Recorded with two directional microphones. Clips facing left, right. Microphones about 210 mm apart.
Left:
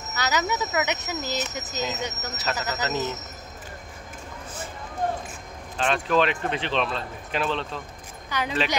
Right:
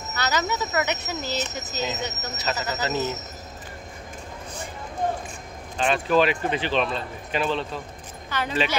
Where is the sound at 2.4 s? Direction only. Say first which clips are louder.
Right 1 dB; 5° right (ahead or behind).